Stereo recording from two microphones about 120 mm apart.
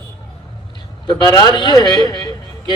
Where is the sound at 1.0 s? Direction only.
35° left (ahead or behind).